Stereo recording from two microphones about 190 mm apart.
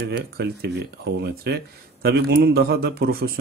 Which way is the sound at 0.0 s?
60° right (ahead or behind).